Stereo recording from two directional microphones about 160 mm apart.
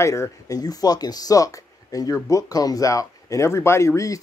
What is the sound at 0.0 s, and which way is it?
A man's voice, 20° left (ahead or behind).